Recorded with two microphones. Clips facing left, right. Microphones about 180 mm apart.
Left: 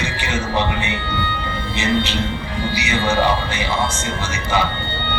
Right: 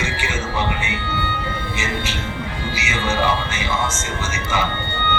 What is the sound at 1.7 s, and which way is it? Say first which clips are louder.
Speech: left 10 dB; 35° left (ahead or behind).